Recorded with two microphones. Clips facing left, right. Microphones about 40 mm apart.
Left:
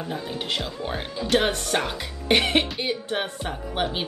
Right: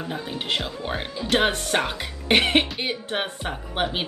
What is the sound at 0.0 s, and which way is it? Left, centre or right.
Speech, right.